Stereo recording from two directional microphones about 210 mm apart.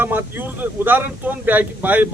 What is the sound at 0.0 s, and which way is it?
Speech, 10° right (ahead or behind).